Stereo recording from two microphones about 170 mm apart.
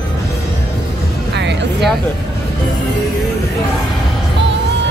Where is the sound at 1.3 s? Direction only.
90° right.